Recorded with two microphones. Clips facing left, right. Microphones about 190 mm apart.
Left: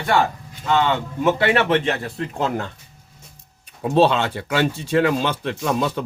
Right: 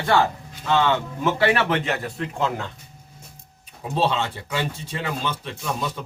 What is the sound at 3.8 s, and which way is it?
Speech, 65° left (ahead or behind).